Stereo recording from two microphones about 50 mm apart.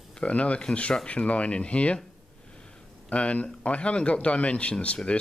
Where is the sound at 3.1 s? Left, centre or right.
Left.